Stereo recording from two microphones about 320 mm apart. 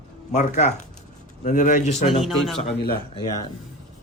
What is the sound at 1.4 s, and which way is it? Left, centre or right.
Speech, left.